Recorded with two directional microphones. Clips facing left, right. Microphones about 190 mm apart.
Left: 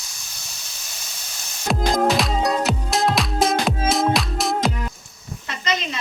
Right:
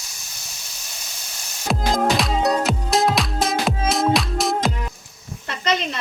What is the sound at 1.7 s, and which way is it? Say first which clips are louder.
Music: left 1 dB; centre (ahead or behind).